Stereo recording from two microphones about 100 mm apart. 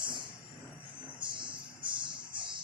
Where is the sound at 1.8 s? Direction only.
55° right (ahead or behind).